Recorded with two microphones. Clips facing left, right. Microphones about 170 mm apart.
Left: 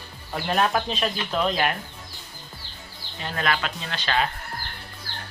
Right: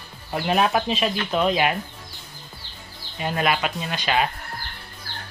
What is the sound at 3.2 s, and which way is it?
Speech, 15° right (ahead or behind).